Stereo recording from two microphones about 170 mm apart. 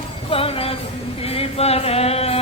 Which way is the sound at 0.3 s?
35° left (ahead or behind).